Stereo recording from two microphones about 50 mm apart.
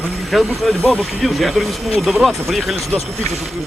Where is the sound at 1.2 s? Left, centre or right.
Centre.